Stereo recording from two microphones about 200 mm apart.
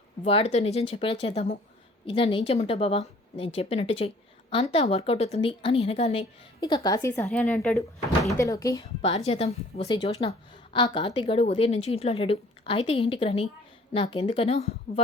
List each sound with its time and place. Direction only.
0.3 s a woman's voice: 30° left (ahead or behind)
6.6 s speech: 20° left (ahead or behind); by 8.4 s centre (ahead or behind)
8.4 s speech: 15° left (ahead or behind)
9.0 s a woman's voice: 30° left (ahead or behind)